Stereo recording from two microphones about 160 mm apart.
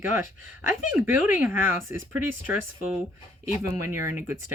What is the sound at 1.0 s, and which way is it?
Speech, 10° right (ahead or behind).